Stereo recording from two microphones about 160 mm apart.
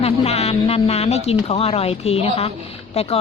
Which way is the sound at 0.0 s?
40° left (ahead or behind).